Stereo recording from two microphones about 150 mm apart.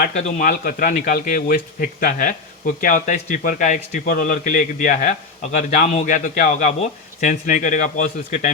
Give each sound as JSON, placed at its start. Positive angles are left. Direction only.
{"t": 0.0, "sound": "a man's voice", "side_deg": 50}
{"t": 0.4, "sound": "speech", "side_deg": 70}